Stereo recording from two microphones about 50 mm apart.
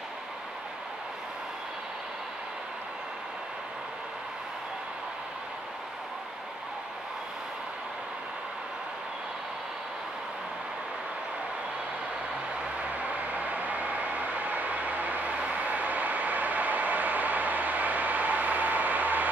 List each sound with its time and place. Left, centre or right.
13.1 s vehicle: right